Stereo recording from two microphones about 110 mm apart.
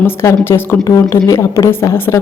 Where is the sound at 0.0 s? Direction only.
25° left (ahead or behind).